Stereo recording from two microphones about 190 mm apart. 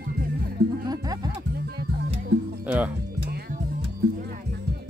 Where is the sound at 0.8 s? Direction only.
20° right (ahead or behind).